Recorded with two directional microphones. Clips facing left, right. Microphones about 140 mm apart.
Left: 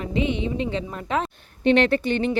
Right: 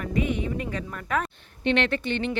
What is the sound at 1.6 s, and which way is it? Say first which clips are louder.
Speech: left 6 dB; 40° left (ahead or behind).